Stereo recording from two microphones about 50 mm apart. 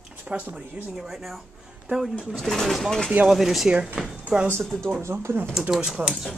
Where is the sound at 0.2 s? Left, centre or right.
Right.